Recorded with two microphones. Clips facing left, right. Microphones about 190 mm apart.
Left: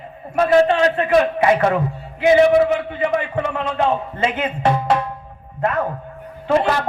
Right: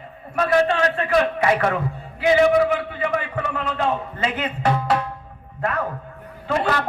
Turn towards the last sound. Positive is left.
turn(degrees=25)  # may be behind; listen again after turning